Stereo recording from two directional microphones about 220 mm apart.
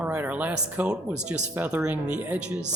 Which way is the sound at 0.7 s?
5° right (ahead or behind).